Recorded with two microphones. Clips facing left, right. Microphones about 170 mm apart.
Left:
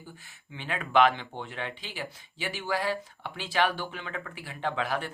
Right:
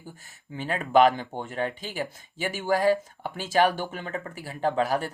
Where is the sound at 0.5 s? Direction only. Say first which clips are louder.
Right 4 dB; 40° right (ahead or behind).